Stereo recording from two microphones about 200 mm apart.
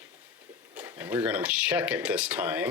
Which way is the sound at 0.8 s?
10° right (ahead or behind).